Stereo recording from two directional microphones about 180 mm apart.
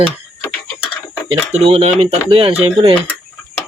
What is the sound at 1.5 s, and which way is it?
Speech, 35° right (ahead or behind).